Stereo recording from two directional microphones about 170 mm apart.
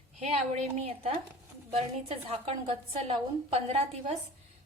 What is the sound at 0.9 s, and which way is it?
A woman's voice, 35° right (ahead or behind).